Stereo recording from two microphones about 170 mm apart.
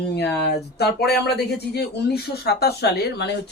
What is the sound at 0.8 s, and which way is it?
Speech, 70° left (ahead or behind).